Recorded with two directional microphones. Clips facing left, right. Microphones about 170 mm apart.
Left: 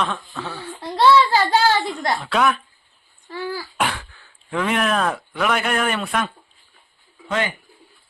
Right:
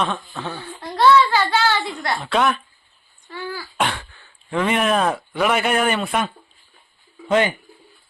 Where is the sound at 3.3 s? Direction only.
35° left (ahead or behind).